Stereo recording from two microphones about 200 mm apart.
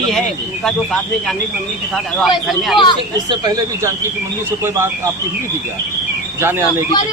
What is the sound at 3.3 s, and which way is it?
Speech, 20° right (ahead or behind).